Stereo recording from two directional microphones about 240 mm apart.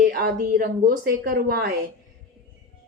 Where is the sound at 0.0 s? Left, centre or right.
Right.